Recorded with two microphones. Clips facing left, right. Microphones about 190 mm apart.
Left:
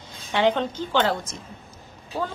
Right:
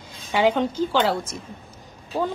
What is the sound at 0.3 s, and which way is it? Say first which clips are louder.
A woman's voice: right 2 dB; 10° right (ahead or behind).